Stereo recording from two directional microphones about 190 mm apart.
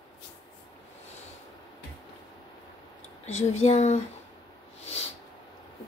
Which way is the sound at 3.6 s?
40° left (ahead or behind).